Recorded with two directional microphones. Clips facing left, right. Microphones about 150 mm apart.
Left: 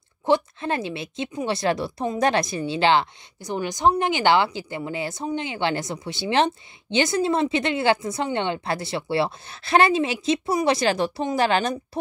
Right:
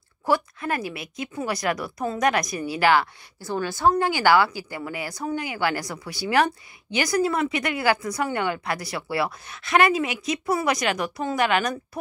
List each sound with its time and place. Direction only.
0.3 s a woman's voice: 25° left (ahead or behind)